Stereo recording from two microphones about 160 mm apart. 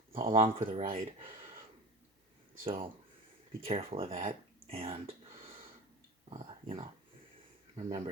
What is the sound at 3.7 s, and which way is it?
Speech, 35° right (ahead or behind).